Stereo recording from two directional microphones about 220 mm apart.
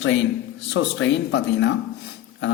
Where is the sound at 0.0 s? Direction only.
55° left (ahead or behind).